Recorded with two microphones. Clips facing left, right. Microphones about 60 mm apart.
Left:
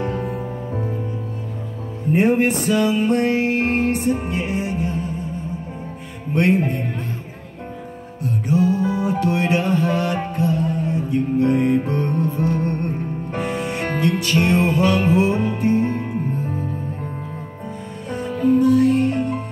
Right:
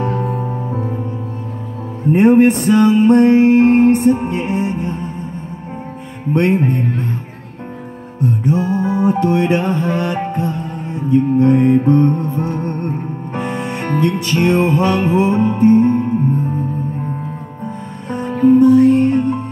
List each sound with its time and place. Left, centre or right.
2.1 s music: right
6.3 s music: right
8.2 s music: right
18.3 s music: right